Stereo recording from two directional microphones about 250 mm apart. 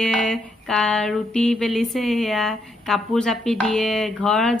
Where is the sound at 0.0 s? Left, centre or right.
Centre.